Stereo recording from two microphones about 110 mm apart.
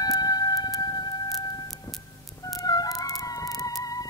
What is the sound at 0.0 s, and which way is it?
Music, 35° left (ahead or behind).